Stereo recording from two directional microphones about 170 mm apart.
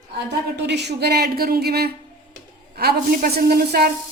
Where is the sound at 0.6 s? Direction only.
90° right; by 3.9 s 65° right (ahead or behind).